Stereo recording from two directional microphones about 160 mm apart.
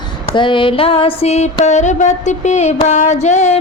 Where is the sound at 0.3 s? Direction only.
30° left (ahead or behind).